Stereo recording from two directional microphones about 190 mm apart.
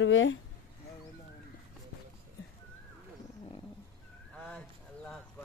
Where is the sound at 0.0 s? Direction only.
85° left.